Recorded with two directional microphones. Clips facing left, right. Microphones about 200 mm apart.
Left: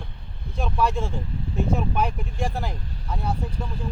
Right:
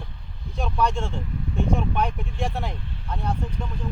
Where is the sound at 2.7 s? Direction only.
40° left (ahead or behind).